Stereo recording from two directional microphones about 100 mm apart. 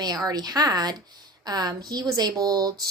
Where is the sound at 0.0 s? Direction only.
40° right (ahead or behind).